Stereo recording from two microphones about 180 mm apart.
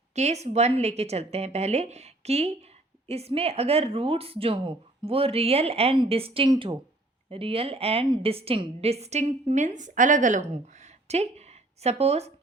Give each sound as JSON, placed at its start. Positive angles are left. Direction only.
{"t": 0.1, "sound": "a woman's voice", "side_deg": -40}